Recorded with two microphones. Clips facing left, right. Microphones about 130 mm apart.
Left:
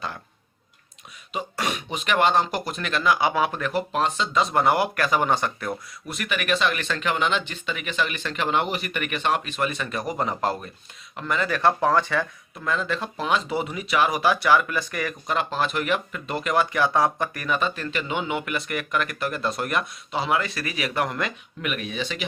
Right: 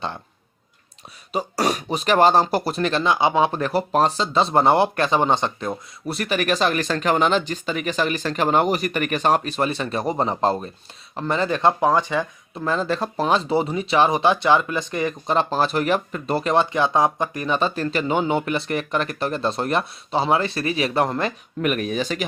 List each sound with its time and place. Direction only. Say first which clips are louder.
1.3 s speech: right 6 dB; 35° right (ahead or behind)
6.1 s speech: right 4 dB; 35° right (ahead or behind); by 12.2 s 15° right (ahead or behind)
12.5 s speech: right 4 dB; 35° right (ahead or behind)